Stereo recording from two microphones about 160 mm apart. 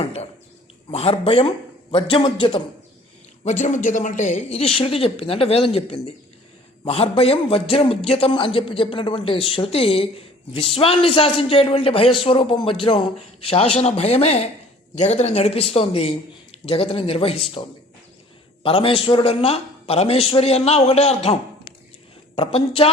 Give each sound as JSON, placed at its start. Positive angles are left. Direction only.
{"t": 0.0, "sound": "a sound", "side_deg": 40}
{"t": 0.9, "sound": "speech", "side_deg": 40}
{"t": 3.4, "sound": "speech", "side_deg": 50}
{"t": 22.4, "sound": "speech", "side_deg": 35}